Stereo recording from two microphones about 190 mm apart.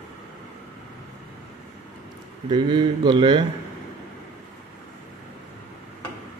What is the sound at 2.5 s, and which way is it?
Speech, 25° right (ahead or behind).